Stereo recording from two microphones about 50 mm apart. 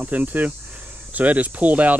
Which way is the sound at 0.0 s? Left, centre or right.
Right.